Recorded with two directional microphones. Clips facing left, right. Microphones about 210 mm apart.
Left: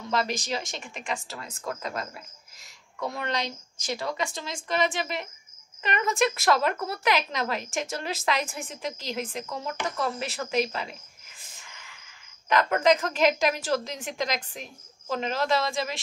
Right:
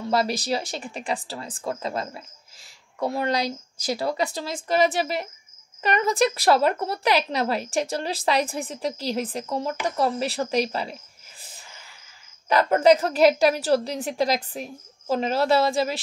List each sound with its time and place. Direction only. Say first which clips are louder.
0.1 s speech: right 4 dB; 35° right (ahead or behind)
9.9 s a sound: right 6 dB; 35° right (ahead or behind)
12.4 s speech: right 5 dB; 35° right (ahead or behind)